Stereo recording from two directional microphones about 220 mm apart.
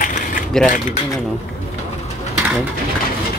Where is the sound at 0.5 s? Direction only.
Centre (ahead or behind).